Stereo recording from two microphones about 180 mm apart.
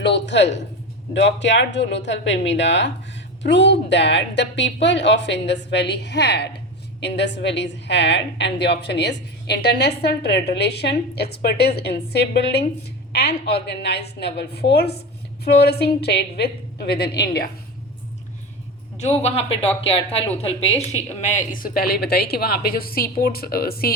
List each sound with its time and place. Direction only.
0.0 s a woman's voice: 75° left (ahead or behind)
19.2 s speech: 30° left (ahead or behind); by 23.9 s 55° left (ahead or behind)